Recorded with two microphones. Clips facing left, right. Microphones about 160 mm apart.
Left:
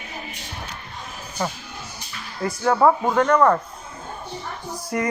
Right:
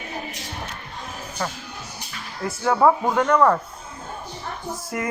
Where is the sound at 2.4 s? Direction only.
Centre (ahead or behind).